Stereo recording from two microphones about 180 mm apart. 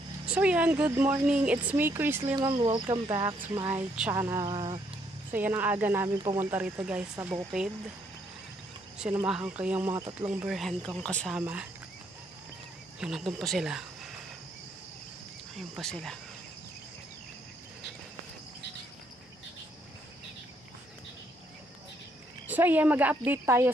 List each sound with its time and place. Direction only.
0.3 s speech: 10° right (ahead or behind)
2.3 s speech: 25° right (ahead or behind)
3.7 s speech: 5° right (ahead or behind)
4.1 s speech: 20° right (ahead or behind)
5.3 s speech: 10° right (ahead or behind)
9.1 s speech: 5° right (ahead or behind)
11.3 s speech: 5° right (ahead or behind)
13.0 s speech: centre (ahead or behind)
15.5 s speech: centre (ahead or behind)
22.5 s speech: 10° right (ahead or behind)